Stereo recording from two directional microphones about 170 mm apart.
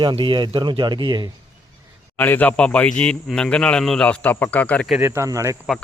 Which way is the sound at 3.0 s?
5° left (ahead or behind).